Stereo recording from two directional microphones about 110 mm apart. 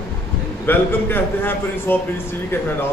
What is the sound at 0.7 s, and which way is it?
A man's voice, 20° left (ahead or behind).